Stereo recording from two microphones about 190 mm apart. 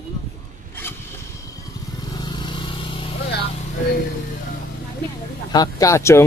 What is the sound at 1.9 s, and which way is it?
Vehicle, 20° left (ahead or behind).